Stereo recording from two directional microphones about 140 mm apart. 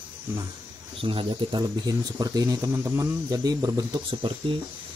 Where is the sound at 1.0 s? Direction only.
40° right (ahead or behind).